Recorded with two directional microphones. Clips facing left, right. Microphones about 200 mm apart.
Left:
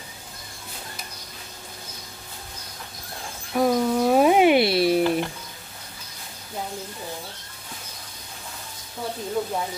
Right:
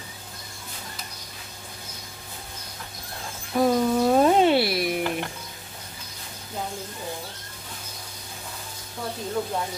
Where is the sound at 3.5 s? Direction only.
Centre (ahead or behind).